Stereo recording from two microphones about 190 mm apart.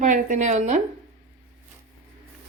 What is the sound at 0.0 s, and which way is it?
Speech, 40° right (ahead or behind).